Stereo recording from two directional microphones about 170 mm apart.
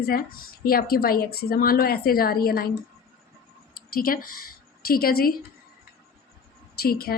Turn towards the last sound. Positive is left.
turn(degrees=65)  # may be behind; listen again after turning